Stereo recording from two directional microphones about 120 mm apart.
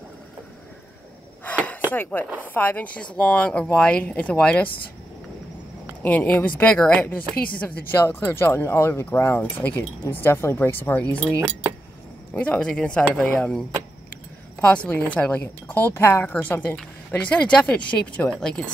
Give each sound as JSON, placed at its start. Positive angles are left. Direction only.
{"t": 1.4, "sound": "a sound", "side_deg": 10}
{"t": 2.4, "sound": "a woman's voice", "side_deg": 15}
{"t": 6.0, "sound": "a woman's voice", "side_deg": 15}
{"t": 12.4, "sound": "a woman's voice", "side_deg": 10}